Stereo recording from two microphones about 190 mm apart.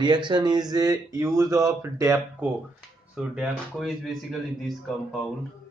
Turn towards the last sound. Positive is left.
turn(degrees=0)  # may be behind; listen again after turning